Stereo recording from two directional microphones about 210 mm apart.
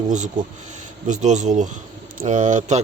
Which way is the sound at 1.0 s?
35° right (ahead or behind).